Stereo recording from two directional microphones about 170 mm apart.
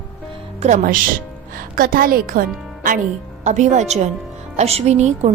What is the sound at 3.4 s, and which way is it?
A woman's voice, 45° right (ahead or behind).